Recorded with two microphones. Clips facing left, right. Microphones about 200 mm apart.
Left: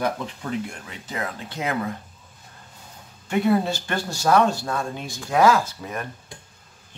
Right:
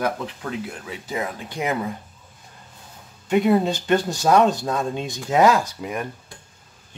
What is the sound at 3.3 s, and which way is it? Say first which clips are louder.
Speech: right 3 dB; 20° right (ahead or behind).